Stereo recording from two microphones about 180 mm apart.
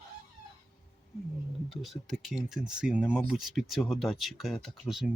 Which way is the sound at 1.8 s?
Centre (ahead or behind).